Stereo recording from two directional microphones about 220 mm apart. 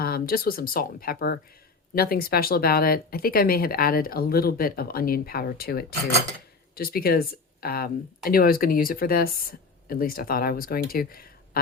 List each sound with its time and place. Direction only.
0.0 s speech: 45° left (ahead or behind)